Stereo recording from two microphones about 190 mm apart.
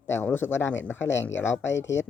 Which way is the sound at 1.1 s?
80° left.